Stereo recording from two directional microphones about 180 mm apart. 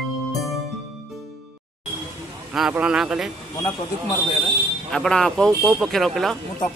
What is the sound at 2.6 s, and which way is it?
Speech, 5° right (ahead or behind).